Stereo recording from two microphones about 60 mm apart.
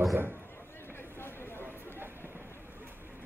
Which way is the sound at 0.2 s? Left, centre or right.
Right.